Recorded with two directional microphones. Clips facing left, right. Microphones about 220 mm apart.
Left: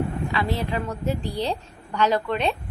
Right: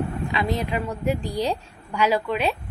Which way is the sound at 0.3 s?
15° right (ahead or behind).